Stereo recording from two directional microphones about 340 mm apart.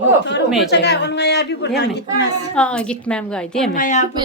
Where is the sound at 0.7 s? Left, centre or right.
Left.